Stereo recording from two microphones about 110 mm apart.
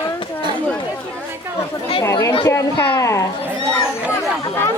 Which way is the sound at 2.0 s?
30° left (ahead or behind).